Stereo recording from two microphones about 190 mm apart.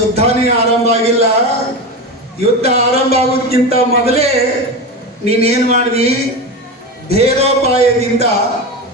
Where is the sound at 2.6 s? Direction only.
35° right (ahead or behind).